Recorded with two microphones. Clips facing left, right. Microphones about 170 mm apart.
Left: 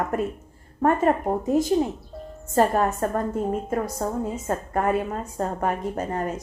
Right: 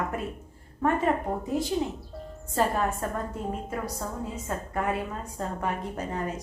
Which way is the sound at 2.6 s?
45° left (ahead or behind).